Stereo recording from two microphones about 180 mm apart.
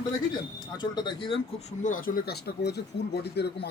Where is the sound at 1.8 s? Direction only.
50° left (ahead or behind); by 3.7 s 65° left (ahead or behind).